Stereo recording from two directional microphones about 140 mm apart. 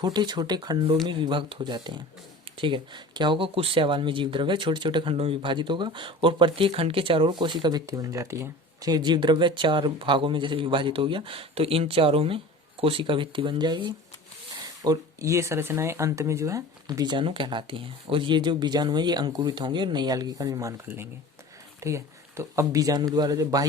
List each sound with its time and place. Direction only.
0.0 s speech: 30° right (ahead or behind)